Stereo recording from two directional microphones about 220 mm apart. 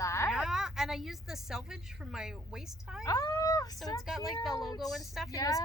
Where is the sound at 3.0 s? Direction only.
15° left (ahead or behind).